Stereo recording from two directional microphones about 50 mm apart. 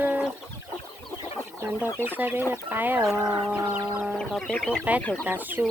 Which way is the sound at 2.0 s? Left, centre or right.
Right.